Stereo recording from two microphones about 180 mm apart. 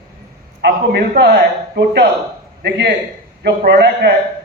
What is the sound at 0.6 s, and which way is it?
A man's voice, 65° right (ahead or behind).